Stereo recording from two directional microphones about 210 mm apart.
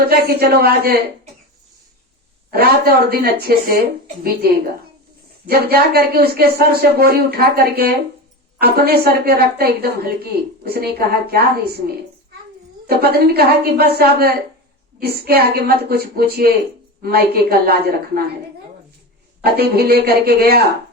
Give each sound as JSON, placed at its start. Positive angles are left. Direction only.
{"t": 0.1, "sound": "speech", "side_deg": -50}
{"t": 2.5, "sound": "speech", "side_deg": -50}
{"t": 5.5, "sound": "speech", "side_deg": -50}
{"t": 12.9, "sound": "speech", "side_deg": -50}
{"t": 19.4, "sound": "speech", "side_deg": -50}